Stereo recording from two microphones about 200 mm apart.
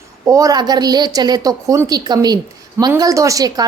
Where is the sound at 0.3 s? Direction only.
15° right (ahead or behind).